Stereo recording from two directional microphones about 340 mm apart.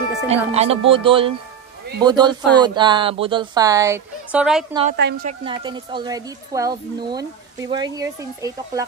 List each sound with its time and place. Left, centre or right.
0.3 s speech: centre
4.9 s speech: right
5.4 s speech: centre